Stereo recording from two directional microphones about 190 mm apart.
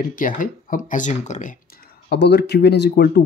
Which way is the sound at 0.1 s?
45° left (ahead or behind).